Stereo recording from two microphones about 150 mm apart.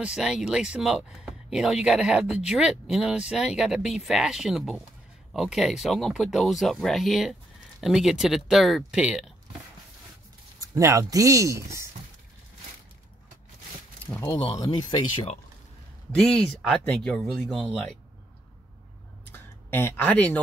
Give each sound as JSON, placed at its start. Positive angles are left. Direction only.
{"t": 0.0, "sound": "speech", "side_deg": -5}
{"t": 10.6, "sound": "speech", "side_deg": -20}
{"t": 14.1, "sound": "speech", "side_deg": 20}
{"t": 16.1, "sound": "speech", "side_deg": 5}
{"t": 19.3, "sound": "a sound", "side_deg": 15}